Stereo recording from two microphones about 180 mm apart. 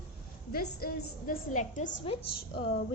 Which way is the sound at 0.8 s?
55° left (ahead or behind).